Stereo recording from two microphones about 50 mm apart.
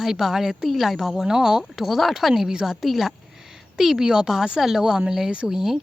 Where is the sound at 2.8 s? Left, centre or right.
Centre.